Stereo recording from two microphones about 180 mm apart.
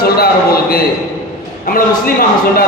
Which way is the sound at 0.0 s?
60° left (ahead or behind).